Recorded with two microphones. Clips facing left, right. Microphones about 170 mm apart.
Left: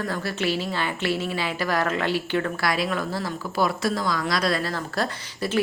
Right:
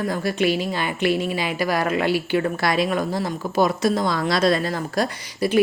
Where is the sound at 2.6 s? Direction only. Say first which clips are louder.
Right 4 dB; 20° right (ahead or behind).